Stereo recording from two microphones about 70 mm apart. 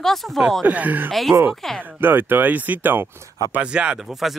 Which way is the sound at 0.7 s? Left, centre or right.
Right.